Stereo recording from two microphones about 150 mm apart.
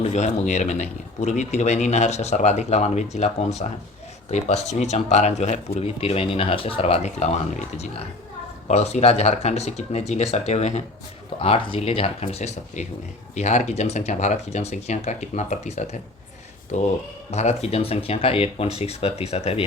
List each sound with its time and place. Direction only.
0.0 s speech: 50° left (ahead or behind)
8.6 s speech: 45° left (ahead or behind)
11.3 s speech: 40° left (ahead or behind)
17.3 s speech: 45° left (ahead or behind)